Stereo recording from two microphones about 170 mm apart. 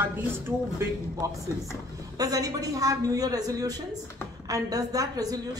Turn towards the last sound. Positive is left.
turn(degrees=-20)  # may be behind; listen again after turning